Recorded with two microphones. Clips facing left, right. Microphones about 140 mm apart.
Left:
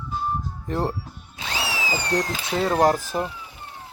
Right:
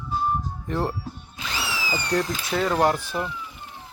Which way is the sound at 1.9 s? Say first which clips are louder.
Right 1 dB; 20° left (ahead or behind).